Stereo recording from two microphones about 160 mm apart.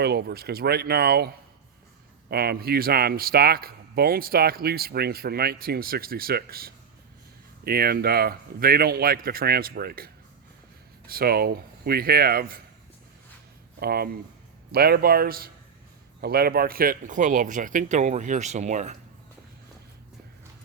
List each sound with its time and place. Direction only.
0.0 s speech: 90° right
2.3 s speech: 75° right (ahead or behind)
11.1 s speech: 70° right (ahead or behind)
13.7 s speech: 75° right (ahead or behind); by 18.9 s 50° right (ahead or behind)